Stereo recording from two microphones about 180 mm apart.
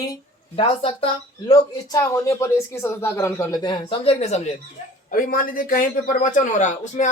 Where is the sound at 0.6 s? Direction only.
30° left (ahead or behind).